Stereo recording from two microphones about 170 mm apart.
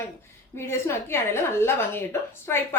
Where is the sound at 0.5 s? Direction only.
15° left (ahead or behind).